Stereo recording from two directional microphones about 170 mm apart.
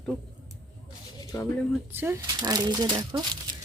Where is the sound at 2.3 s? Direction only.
25° right (ahead or behind).